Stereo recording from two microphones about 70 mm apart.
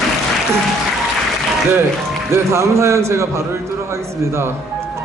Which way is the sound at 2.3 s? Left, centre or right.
Right.